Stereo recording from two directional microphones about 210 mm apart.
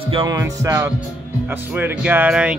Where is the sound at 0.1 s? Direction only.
20° right (ahead or behind).